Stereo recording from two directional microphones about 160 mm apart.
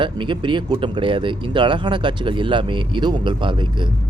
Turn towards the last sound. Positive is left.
turn(degrees=-30)  # may be behind; listen again after turning